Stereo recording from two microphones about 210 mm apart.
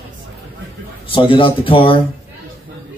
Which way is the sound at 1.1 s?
25° left (ahead or behind).